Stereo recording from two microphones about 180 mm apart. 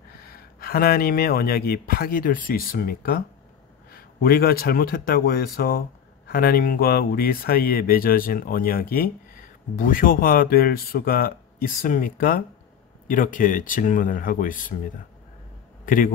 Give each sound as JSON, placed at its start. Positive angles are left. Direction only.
{"t": 0.2, "sound": "speech", "side_deg": 55}
{"t": 15.8, "sound": "a man's voice", "side_deg": 50}